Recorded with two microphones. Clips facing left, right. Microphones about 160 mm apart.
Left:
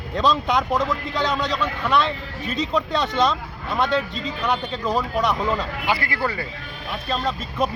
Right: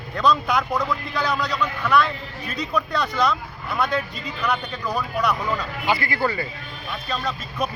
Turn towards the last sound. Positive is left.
turn(degrees=25)  # may be behind; listen again after turning